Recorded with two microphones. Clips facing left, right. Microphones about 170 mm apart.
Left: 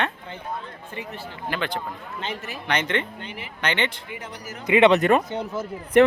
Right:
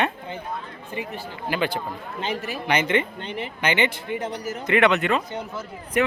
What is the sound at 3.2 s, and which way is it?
Speech, 10° left (ahead or behind).